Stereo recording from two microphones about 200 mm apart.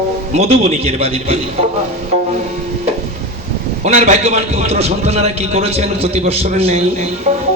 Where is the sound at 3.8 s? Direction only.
35° right (ahead or behind).